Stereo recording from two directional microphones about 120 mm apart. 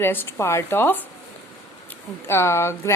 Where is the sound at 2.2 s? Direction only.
25° left (ahead or behind).